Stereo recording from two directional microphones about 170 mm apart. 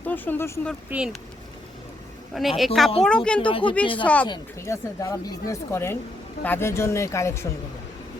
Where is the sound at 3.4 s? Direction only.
30° left (ahead or behind).